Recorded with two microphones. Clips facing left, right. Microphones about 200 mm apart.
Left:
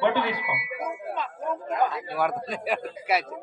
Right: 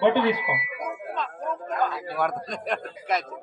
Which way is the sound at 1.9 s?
5° left (ahead or behind).